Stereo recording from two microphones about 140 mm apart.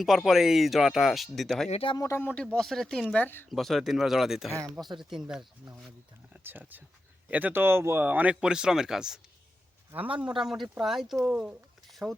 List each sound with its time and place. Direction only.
0.0 s speech: centre (ahead or behind)
1.7 s speech: 40° left (ahead or behind)
2.0 s speech: 20° left (ahead or behind); by 4.5 s 5° right (ahead or behind)
4.5 s speech: 20° right (ahead or behind)
4.8 s speech: centre (ahead or behind)
6.3 s speech: 15° right (ahead or behind)